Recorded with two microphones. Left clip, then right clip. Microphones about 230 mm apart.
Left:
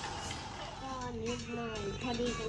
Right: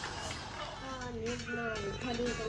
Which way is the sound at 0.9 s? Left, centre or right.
Centre.